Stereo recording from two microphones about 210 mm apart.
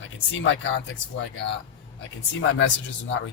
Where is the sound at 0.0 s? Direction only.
65° left (ahead or behind).